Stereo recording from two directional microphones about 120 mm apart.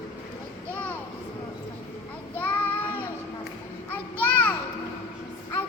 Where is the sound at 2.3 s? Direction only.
15° left (ahead or behind).